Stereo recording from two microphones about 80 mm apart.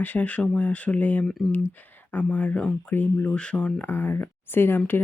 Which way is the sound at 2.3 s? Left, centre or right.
Centre.